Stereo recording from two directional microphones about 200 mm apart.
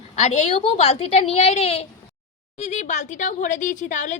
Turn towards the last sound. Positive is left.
turn(degrees=35)  # may be behind; listen again after turning